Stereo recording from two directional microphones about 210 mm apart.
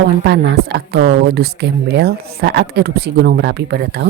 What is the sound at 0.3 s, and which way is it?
Speech, 50° right (ahead or behind).